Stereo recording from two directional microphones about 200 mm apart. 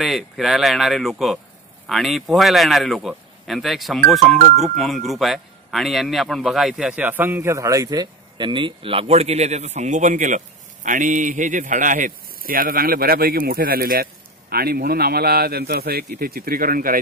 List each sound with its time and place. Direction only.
0.0 s a man's voice: centre (ahead or behind); by 17.0 s 45° right (ahead or behind)